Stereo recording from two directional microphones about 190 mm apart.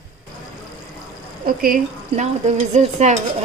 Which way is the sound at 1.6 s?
45° right (ahead or behind).